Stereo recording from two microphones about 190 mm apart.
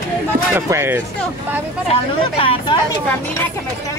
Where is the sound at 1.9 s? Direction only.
30° left (ahead or behind).